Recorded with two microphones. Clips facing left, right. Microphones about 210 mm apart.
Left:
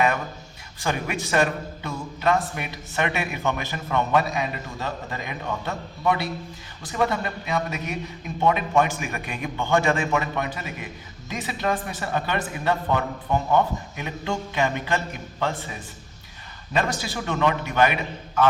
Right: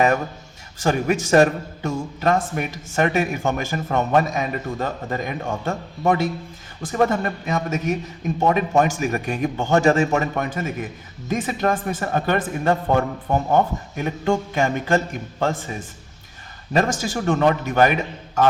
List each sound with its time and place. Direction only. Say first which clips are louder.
0.8 s a man's voice: right 7 dB; 45° right (ahead or behind)
16.7 s a man's voice: right 5 dB; 45° right (ahead or behind)